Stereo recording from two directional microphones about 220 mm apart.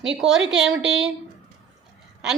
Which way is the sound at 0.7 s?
60° right (ahead or behind).